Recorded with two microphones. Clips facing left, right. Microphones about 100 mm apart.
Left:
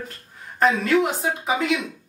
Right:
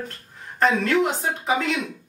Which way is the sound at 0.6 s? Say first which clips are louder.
Left 1 dB; 5° left (ahead or behind).